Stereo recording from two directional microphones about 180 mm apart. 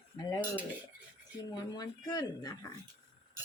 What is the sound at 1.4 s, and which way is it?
Speech, 20° left (ahead or behind).